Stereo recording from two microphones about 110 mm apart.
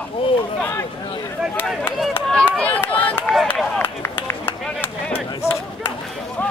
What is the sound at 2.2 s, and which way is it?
Speech, 5° left (ahead or behind).